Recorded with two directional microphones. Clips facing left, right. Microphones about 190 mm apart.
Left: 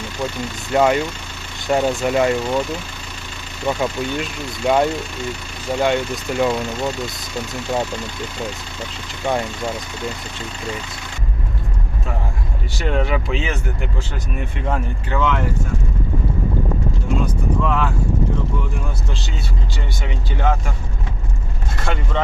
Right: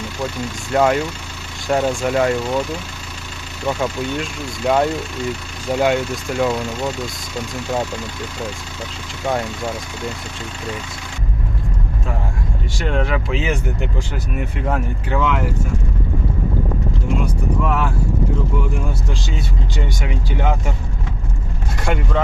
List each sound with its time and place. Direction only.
0.7 s speech: 5° left (ahead or behind)
9.2 s speech: centre (ahead or behind)
12.7 s speech: centre (ahead or behind)
14.6 s speech: 5° right (ahead or behind)
17.7 s speech: 10° right (ahead or behind)
20.1 s speech: 15° right (ahead or behind)
21.8 s speech: 15° right (ahead or behind)